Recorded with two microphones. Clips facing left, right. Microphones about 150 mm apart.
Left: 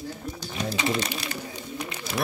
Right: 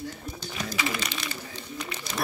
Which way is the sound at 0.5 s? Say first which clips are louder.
Left 5 dB; 25° left (ahead or behind).